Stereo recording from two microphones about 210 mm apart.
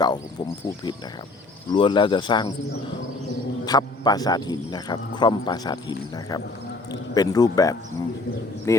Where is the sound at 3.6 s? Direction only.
20° left (ahead or behind).